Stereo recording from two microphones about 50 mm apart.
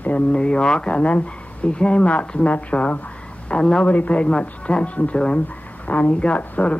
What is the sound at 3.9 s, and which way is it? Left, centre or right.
Speech, left.